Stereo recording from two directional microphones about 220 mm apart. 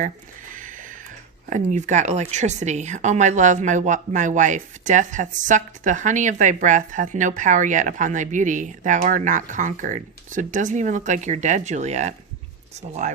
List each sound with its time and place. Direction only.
1.5 s speech: 35° right (ahead or behind)